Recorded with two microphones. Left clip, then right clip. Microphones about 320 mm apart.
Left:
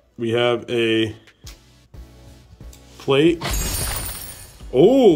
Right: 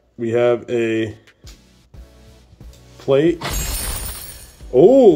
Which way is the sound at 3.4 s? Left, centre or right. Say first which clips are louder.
Right 1 dB; centre.